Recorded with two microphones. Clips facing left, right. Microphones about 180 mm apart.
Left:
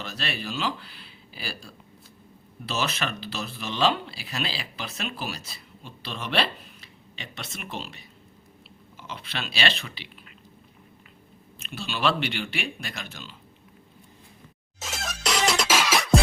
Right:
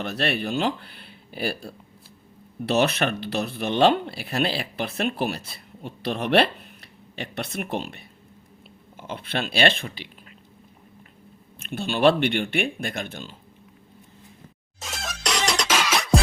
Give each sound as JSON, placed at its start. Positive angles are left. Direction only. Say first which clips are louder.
{"t": 0.0, "sound": "speech", "louder": "right 8 dB", "side_deg": -60}
{"t": 11.6, "sound": "speech", "louder": "right 8 dB", "side_deg": -55}
{"t": 14.8, "sound": "music", "louder": "even", "side_deg": 0}